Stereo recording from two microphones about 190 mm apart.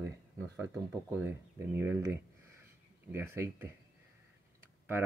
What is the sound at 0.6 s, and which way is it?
Speech, 10° right (ahead or behind).